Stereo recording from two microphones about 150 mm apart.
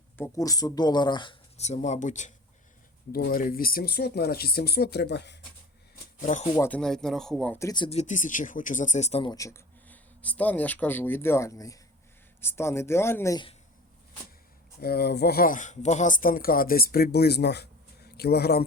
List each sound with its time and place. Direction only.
0.2 s speech: 25° left (ahead or behind)
1.5 s speech: 45° left (ahead or behind)
3.1 s speech: 85° left
6.2 s speech: 55° left (ahead or behind)
6.6 s speech: 10° left (ahead or behind)
7.6 s speech: 25° left (ahead or behind)
7.9 s speech: 50° left (ahead or behind)
9.2 s speech: 25° left (ahead or behind)
9.9 s speech: 10° left (ahead or behind)
14.8 s speech: 90° left